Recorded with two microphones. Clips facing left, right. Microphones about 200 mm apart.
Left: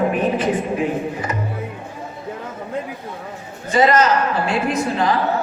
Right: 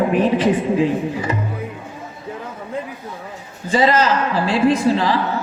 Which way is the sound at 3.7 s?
30° right (ahead or behind).